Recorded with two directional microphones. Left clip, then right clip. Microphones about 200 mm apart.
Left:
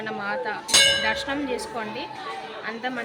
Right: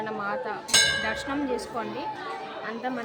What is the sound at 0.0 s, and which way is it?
A woman's voice, centre (ahead or behind).